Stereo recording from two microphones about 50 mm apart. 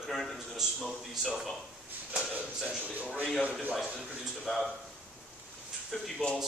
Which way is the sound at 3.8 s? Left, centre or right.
Centre.